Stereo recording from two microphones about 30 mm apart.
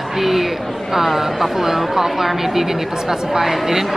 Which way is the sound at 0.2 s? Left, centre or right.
Centre.